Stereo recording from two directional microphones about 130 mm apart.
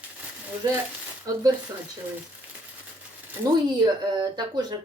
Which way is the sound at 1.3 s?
25° right (ahead or behind).